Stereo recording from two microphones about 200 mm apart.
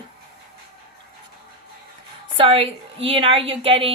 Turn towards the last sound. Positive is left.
turn(degrees=-25)  # may be behind; listen again after turning